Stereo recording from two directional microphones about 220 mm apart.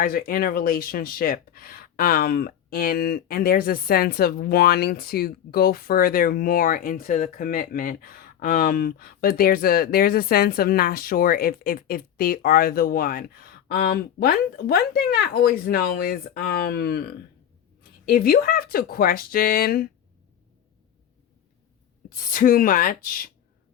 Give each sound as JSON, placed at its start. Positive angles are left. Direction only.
{"t": 0.0, "sound": "speech", "side_deg": 40}
{"t": 22.1, "sound": "speech", "side_deg": 40}